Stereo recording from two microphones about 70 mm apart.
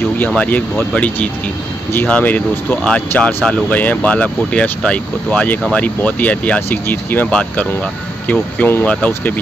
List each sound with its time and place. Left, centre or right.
0.4 s speech: left
7.2 s speech: centre
8.3 s speech: left